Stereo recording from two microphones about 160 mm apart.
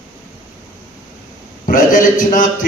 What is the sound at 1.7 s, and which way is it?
A man's voice, 55° left (ahead or behind).